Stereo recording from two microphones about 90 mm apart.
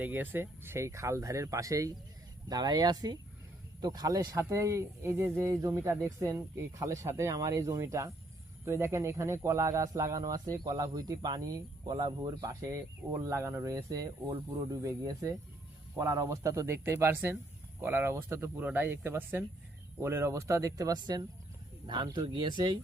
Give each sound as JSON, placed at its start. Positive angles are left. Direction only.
{"t": 0.0, "sound": "speech", "side_deg": -20}
{"t": 2.5, "sound": "speech", "side_deg": -50}
{"t": 4.4, "sound": "speech", "side_deg": -35}